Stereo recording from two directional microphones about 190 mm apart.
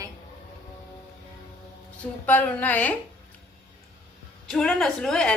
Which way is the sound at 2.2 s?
10° left (ahead or behind).